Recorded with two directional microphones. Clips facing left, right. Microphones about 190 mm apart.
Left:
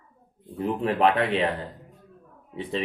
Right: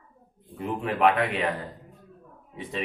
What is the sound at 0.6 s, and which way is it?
Speech, 30° left (ahead or behind).